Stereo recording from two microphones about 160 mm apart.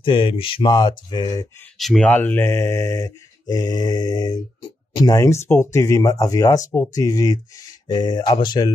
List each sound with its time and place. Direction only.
0.0 s speech: 30° left (ahead or behind)
1.8 s speech: centre (ahead or behind); by 8.7 s 25° left (ahead or behind)